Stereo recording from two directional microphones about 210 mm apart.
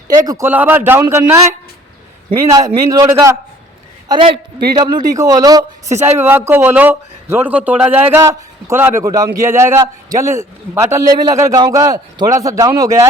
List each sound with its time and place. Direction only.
0.3 s a man's voice: 10° right (ahead or behind)
2.5 s a man's voice: 15° right (ahead or behind)
4.8 s a man's voice: 20° right (ahead or behind)
5.9 s speech: 30° right (ahead or behind)
6.1 s a man's voice: 10° right (ahead or behind)